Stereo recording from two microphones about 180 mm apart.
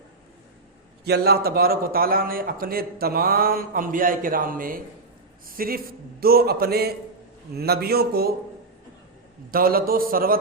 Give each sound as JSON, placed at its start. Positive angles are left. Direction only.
{"t": 1.0, "sound": "a man's voice", "side_deg": -60}
{"t": 9.5, "sound": "a man's voice", "side_deg": -55}